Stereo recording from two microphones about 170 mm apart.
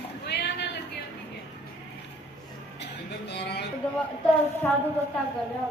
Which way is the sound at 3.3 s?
75° left (ahead or behind).